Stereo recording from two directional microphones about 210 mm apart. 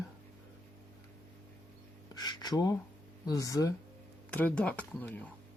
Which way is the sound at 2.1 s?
20° left (ahead or behind).